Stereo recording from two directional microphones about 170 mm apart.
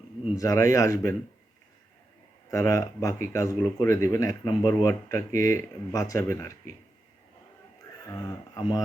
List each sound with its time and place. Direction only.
0.3 s speech: 20° left (ahead or behind)
2.5 s speech: 20° left (ahead or behind)
8.1 s speech: 20° left (ahead or behind)